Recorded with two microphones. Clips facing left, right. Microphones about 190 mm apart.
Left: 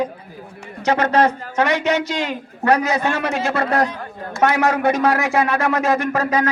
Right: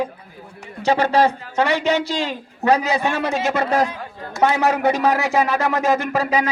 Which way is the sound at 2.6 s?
15° right (ahead or behind).